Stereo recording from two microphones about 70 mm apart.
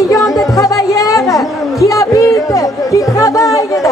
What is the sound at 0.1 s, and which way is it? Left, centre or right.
Music, left.